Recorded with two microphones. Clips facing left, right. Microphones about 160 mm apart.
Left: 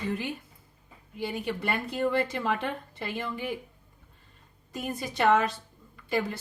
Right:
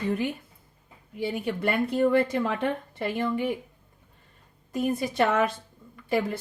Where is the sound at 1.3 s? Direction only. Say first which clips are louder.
Right 4 dB; 55° right (ahead or behind).